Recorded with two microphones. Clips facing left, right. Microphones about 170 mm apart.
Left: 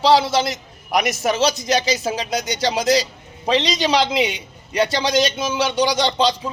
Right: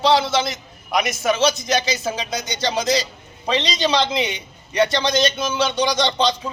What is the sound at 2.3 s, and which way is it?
A man's voice, 10° left (ahead or behind).